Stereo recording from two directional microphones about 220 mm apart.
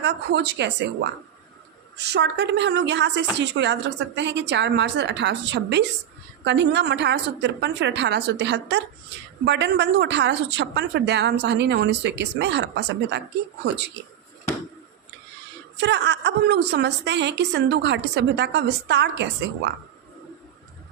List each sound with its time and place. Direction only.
0.0 s a woman's voice: 50° right (ahead or behind)
15.8 s a woman's voice: 50° right (ahead or behind)